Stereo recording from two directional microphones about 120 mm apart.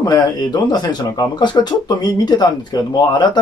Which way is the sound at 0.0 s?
35° left (ahead or behind).